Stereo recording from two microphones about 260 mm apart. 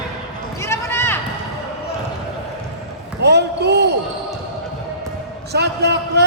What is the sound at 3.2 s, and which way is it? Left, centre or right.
Basketball bounce, right.